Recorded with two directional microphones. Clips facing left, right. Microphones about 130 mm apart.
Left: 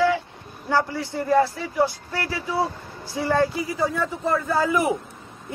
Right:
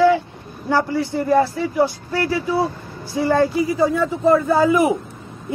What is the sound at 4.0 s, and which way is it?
Speech, 20° right (ahead or behind).